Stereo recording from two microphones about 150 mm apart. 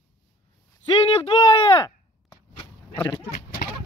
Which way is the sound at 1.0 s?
35° left (ahead or behind).